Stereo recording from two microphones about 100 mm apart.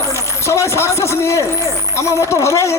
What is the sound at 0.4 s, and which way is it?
A man's voice, 30° left (ahead or behind).